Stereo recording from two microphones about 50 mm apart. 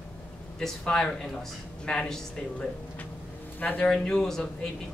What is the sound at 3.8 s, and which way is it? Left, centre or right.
Speech, centre.